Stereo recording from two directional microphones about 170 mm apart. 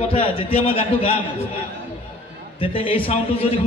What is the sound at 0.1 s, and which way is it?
A man's voice, 30° left (ahead or behind).